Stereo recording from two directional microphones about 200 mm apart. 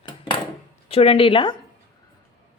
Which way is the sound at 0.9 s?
30° left (ahead or behind).